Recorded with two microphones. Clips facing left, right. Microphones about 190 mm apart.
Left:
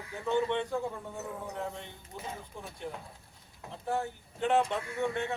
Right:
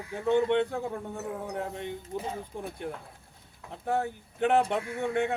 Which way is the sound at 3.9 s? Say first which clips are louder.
Right 4 dB; 60° right (ahead or behind).